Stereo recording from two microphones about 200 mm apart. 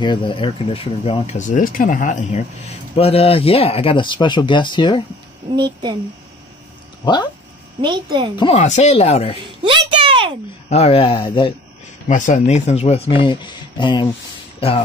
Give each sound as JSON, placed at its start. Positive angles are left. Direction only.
{"t": 0.0, "sound": "speech", "side_deg": 25}
{"t": 1.5, "sound": "speech", "side_deg": 40}
{"t": 5.6, "sound": "speech", "side_deg": -25}
{"t": 7.8, "sound": "speech", "side_deg": -25}
{"t": 8.4, "sound": "speech", "side_deg": 25}
{"t": 8.6, "sound": "speech", "side_deg": 35}
{"t": 9.6, "sound": "a sound", "side_deg": -25}
{"t": 10.7, "sound": "speech", "side_deg": 30}
{"t": 12.1, "sound": "speech", "side_deg": 40}